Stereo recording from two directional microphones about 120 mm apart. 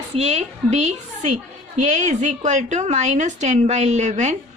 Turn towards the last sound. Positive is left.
turn(degrees=-75)  # may be behind; listen again after turning